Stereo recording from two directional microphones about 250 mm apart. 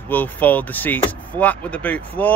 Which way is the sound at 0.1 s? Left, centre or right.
Centre.